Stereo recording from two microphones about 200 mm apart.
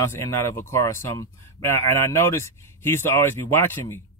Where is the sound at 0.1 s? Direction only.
15° left (ahead or behind).